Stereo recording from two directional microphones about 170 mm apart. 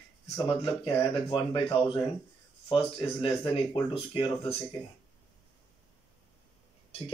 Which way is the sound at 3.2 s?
30° left (ahead or behind).